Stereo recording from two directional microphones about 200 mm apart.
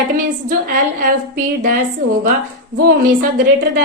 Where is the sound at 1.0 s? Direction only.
45° right (ahead or behind).